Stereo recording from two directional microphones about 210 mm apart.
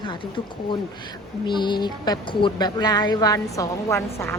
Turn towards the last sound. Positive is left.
turn(degrees=15)  # may be behind; listen again after turning